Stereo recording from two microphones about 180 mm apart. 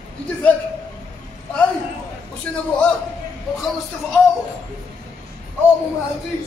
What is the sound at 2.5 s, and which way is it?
Speech, 5° left (ahead or behind).